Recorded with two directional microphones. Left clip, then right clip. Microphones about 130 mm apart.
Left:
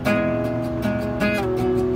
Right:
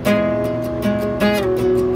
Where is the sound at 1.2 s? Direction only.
15° right (ahead or behind).